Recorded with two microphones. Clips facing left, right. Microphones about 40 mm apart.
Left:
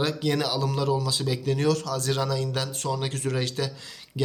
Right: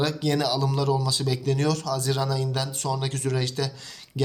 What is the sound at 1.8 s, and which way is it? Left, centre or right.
Speech, left.